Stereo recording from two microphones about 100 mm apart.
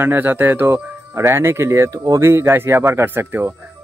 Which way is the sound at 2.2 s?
25° right (ahead or behind).